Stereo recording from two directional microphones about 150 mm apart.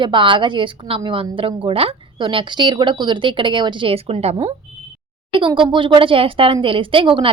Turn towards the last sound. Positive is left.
turn(degrees=-35)  # may be behind; listen again after turning